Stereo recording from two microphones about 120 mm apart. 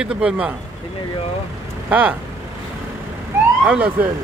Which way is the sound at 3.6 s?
10° right (ahead or behind).